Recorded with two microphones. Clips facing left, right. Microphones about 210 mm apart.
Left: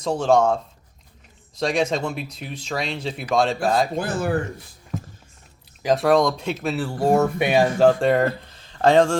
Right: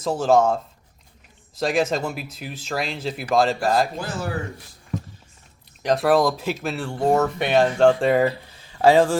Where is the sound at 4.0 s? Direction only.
55° left (ahead or behind).